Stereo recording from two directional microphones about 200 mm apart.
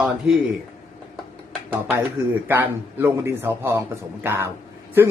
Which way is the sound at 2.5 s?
10° right (ahead or behind).